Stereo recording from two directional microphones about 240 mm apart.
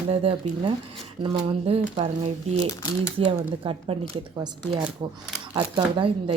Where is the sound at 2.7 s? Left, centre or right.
Centre.